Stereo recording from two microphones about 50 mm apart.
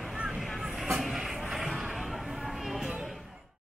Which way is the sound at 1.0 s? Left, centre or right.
Centre.